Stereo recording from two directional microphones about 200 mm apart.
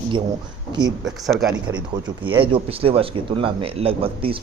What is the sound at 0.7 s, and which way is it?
Speech, 20° right (ahead or behind).